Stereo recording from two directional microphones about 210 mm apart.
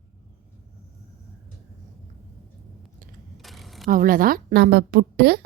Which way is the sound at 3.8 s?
40° right (ahead or behind).